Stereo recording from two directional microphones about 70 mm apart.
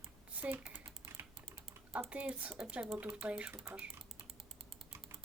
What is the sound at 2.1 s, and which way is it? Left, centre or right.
Speech, centre.